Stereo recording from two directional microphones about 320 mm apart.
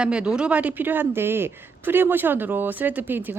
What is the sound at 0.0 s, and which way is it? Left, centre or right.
Speech, centre.